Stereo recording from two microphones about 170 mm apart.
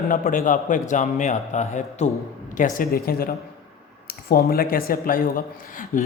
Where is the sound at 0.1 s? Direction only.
50° left (ahead or behind).